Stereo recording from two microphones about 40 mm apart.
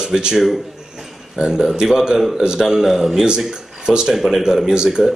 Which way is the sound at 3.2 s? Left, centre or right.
Centre.